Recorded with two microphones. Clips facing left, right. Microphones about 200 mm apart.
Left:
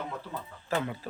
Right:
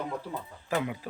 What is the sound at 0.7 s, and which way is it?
Mantra, 10° right (ahead or behind).